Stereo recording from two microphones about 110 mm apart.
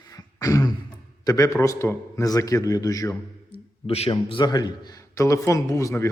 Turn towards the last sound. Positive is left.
turn(degrees=25)  # may be behind; listen again after turning